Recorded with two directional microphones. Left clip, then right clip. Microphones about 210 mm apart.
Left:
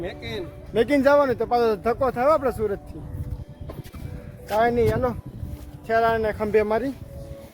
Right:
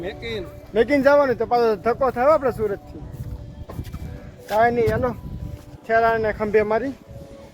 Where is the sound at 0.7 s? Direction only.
5° left (ahead or behind).